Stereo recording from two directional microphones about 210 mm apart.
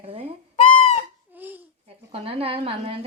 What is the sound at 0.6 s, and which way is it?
Fowl, 25° left (ahead or behind).